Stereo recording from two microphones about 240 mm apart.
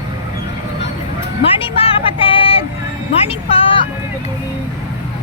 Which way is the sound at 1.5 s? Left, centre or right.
Left.